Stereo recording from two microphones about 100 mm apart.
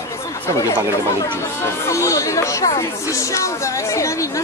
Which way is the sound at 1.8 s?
30° left (ahead or behind).